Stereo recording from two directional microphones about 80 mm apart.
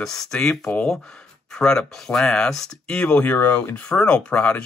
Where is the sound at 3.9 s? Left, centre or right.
Centre.